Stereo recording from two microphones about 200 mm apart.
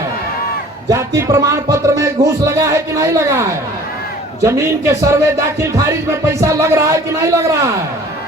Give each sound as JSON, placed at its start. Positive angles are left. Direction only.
{"t": 0.9, "sound": "music", "side_deg": -15}
{"t": 4.4, "sound": "music", "side_deg": -15}